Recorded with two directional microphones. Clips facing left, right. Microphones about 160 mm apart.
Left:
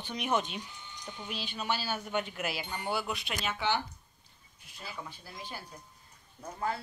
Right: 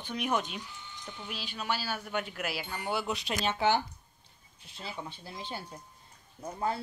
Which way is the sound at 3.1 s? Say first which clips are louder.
Right 4 dB; 35° right (ahead or behind).